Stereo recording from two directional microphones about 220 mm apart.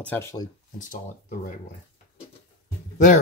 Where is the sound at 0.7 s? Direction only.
35° left (ahead or behind).